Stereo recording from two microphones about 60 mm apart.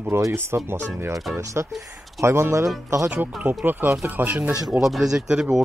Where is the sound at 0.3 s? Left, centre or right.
Right.